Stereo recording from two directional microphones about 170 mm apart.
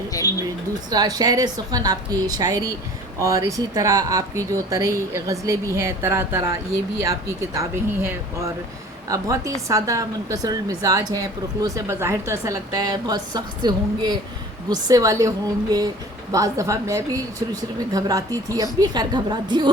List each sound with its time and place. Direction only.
0.1 s a sound: 20° left (ahead or behind)
0.7 s a woman's voice: 25° right (ahead or behind)
16.3 s a woman's voice: 20° right (ahead or behind)